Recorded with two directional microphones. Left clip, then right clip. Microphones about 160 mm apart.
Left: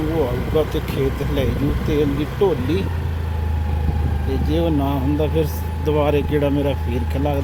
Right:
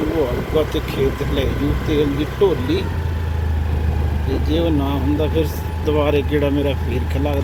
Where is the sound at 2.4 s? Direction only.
40° left (ahead or behind).